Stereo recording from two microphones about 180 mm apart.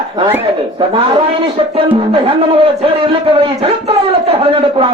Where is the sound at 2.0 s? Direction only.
30° right (ahead or behind).